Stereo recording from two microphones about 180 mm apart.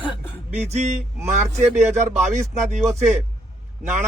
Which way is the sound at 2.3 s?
40° right (ahead or behind).